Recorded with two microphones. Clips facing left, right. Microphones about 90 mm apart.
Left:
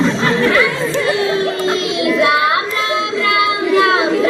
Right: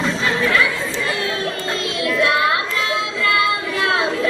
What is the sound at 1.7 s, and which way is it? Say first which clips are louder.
Child singing: left 6 dB; 20° left (ahead or behind).